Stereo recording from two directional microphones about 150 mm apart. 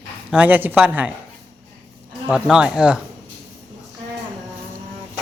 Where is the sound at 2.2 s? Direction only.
5° right (ahead or behind).